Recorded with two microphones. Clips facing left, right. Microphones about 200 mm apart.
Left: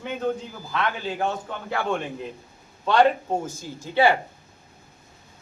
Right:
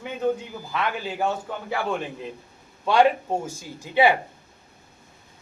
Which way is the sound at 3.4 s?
15° right (ahead or behind).